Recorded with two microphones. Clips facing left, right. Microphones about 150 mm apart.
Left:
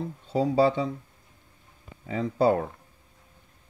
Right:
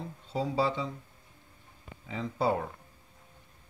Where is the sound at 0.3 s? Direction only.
50° left (ahead or behind).